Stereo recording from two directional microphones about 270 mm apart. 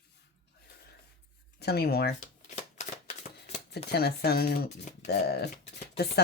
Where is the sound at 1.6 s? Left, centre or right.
Left.